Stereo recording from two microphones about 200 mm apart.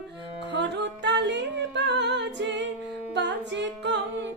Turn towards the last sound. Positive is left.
turn(degrees=-60)  # may be behind; listen again after turning